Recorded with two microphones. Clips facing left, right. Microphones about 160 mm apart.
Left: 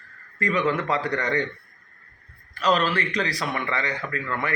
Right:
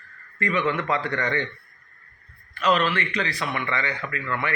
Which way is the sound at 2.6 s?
35° left (ahead or behind).